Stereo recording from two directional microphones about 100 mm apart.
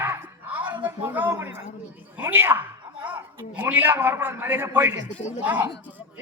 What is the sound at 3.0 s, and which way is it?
A man's voice, 20° right (ahead or behind).